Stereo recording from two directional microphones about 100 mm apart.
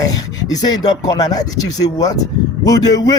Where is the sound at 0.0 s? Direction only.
40° left (ahead or behind).